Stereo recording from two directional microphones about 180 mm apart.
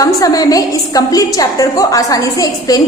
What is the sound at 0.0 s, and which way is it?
A woman's voice, 20° left (ahead or behind).